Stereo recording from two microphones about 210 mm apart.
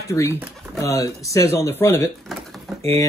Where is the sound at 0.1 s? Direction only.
15° left (ahead or behind).